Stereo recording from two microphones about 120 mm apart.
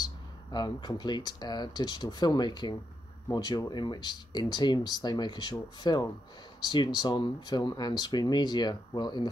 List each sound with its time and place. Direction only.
0.0 s speech: 35° left (ahead or behind)